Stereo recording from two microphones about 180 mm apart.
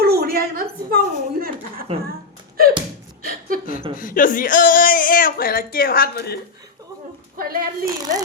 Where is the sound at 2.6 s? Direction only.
55° right (ahead or behind).